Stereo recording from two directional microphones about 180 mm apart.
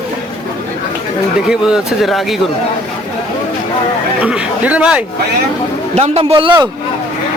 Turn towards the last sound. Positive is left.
turn(degrees=-30)  # may be behind; listen again after turning